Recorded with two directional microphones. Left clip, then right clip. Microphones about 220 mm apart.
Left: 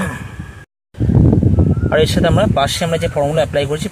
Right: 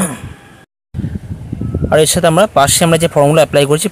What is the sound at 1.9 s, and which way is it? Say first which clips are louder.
Speech: right 5 dB; 30° right (ahead or behind).